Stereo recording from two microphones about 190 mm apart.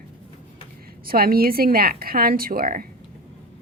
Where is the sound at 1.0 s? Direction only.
50° right (ahead or behind).